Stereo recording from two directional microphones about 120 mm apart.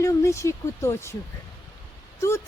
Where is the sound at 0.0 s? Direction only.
25° left (ahead or behind).